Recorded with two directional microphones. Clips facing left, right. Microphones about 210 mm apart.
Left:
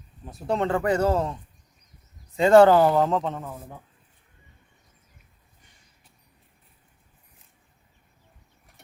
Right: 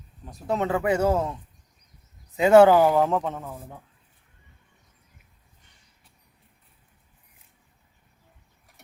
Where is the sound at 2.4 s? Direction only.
5° right (ahead or behind).